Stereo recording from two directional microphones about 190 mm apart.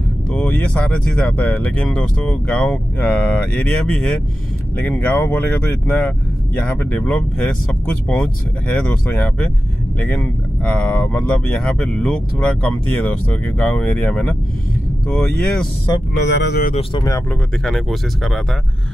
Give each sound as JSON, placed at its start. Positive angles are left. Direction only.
{"t": 0.3, "sound": "speech", "side_deg": 10}
{"t": 16.3, "sound": "speech", "side_deg": 60}
{"t": 17.0, "sound": "speech", "side_deg": 15}
{"t": 17.6, "sound": "speech", "side_deg": 0}